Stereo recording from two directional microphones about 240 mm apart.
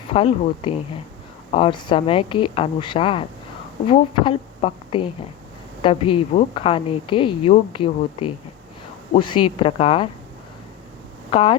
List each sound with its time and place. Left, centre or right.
0.1 s a woman's voice: left
11.3 s a woman's voice: left